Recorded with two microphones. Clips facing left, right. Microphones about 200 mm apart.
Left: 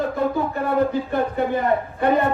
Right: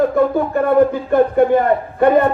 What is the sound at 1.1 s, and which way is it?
Speech, 55° right (ahead or behind).